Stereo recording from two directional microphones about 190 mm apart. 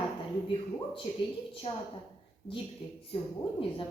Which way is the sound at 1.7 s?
30° left (ahead or behind).